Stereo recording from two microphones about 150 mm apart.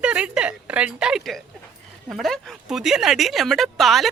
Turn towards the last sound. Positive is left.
turn(degrees=0)  # may be behind; listen again after turning